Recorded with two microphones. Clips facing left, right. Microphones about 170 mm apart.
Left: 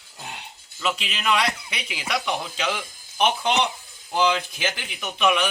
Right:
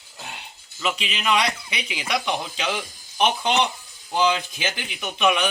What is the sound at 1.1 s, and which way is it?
Speech, 5° left (ahead or behind).